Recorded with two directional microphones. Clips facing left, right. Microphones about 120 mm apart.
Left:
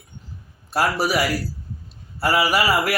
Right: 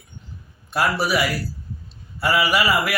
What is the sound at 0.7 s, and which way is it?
A man's voice, 40° left (ahead or behind).